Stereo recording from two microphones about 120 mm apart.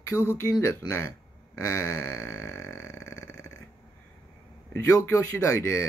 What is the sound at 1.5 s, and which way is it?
Burping, 25° left (ahead or behind).